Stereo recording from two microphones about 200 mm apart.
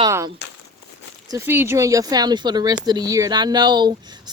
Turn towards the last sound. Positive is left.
turn(degrees=-20)  # may be behind; listen again after turning